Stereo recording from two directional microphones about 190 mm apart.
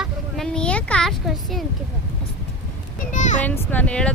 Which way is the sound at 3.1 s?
40° left (ahead or behind).